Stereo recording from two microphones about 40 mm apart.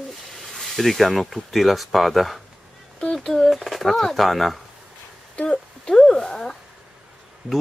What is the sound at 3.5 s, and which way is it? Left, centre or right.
Speech, centre.